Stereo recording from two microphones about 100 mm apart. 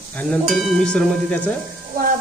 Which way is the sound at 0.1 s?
15° left (ahead or behind).